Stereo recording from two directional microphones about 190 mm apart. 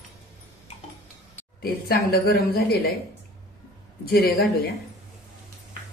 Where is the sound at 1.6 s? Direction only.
55° left (ahead or behind).